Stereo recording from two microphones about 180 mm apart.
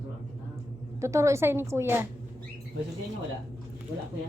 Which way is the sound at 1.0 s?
15° right (ahead or behind).